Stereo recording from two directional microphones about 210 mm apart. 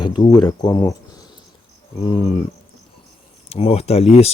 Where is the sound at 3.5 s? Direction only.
30° left (ahead or behind).